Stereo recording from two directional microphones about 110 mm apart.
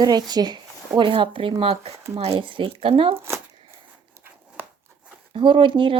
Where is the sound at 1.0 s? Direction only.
50° right (ahead or behind).